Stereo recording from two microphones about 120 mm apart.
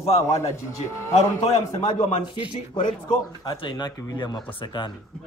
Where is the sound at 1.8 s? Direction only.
65° left (ahead or behind); by 4.9 s 40° left (ahead or behind).